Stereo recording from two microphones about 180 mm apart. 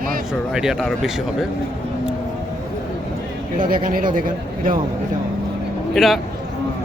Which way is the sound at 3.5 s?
50° right (ahead or behind).